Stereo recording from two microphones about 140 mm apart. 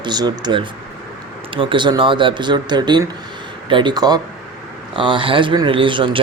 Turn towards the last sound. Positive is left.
turn(degrees=-35)  # may be behind; listen again after turning